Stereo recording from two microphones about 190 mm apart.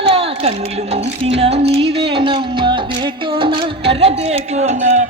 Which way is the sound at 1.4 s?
30° right (ahead or behind).